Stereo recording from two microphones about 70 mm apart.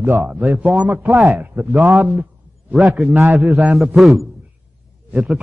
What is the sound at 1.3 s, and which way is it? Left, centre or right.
Speech, right.